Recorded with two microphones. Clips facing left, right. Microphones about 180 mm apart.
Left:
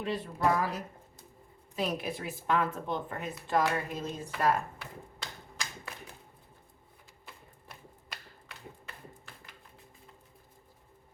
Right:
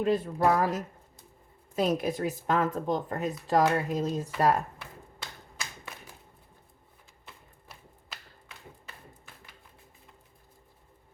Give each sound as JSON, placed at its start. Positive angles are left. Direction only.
{"t": 0.0, "sound": "a woman's voice", "side_deg": -45}